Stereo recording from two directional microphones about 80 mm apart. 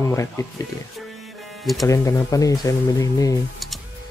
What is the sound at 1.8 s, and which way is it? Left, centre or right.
Speech, left.